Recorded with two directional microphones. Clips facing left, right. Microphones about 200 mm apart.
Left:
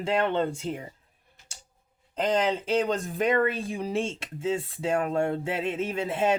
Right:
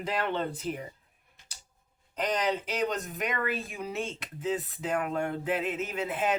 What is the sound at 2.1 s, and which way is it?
Speech, 30° left (ahead or behind).